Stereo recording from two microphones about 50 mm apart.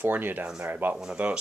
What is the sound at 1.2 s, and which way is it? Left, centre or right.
Speech, right.